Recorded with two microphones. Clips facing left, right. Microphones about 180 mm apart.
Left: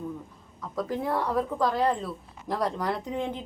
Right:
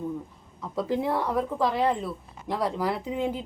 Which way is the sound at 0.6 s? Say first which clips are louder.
Right 3 dB; 25° right (ahead or behind).